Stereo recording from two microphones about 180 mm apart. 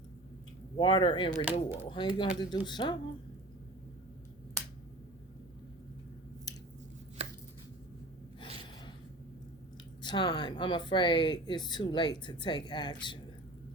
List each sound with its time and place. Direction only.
0.8 s speech: 25° left (ahead or behind)
1.5 s speech: 10° right (ahead or behind)
1.9 s speech: 25° left (ahead or behind)
7.2 s chopping: 35° right (ahead or behind)
10.0 s speech: 25° left (ahead or behind)